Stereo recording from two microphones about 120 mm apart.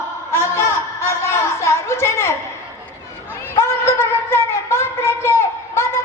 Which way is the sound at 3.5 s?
25° left (ahead or behind).